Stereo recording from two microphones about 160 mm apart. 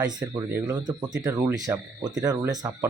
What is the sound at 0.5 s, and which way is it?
Speech, 10° right (ahead or behind).